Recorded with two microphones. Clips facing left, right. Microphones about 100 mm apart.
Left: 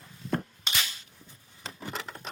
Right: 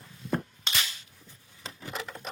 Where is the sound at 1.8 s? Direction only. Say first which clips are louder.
Even; centre (ahead or behind).